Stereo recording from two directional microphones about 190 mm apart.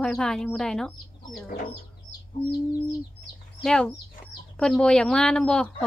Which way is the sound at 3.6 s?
5° left (ahead or behind).